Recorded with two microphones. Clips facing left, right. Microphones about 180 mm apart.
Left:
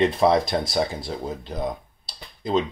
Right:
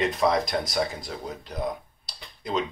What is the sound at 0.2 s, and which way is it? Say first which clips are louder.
Speech: left 4 dB; 30° left (ahead or behind).